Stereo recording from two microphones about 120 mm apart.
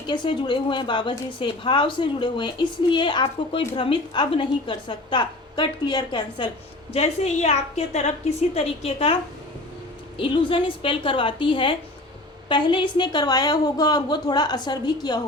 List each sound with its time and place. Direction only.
0.1 s a woman's voice: 45° left (ahead or behind)
6.9 s a woman's voice: 60° left (ahead or behind)
10.2 s a woman's voice: 45° left (ahead or behind)